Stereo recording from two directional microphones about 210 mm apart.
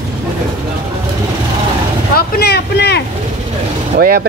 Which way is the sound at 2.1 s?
50° left (ahead or behind).